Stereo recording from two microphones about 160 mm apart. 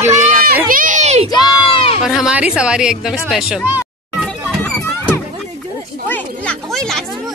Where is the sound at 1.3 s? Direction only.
30° left (ahead or behind).